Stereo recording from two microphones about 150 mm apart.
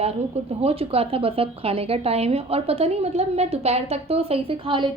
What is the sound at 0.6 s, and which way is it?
A woman's voice, 40° right (ahead or behind).